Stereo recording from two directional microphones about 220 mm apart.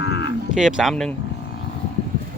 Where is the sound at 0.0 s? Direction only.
50° left (ahead or behind).